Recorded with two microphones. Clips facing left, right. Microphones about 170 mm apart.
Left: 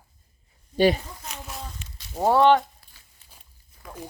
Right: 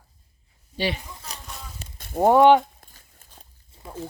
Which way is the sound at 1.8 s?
50° right (ahead or behind).